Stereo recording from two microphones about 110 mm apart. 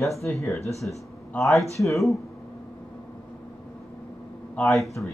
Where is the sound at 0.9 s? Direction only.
15° left (ahead or behind).